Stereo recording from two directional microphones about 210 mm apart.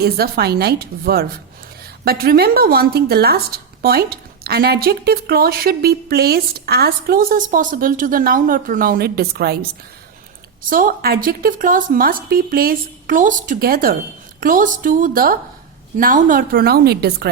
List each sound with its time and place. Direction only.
0.0 s a woman's voice: 50° right (ahead or behind)